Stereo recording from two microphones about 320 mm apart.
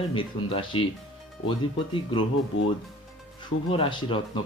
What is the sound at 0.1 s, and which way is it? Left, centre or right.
Speech, centre.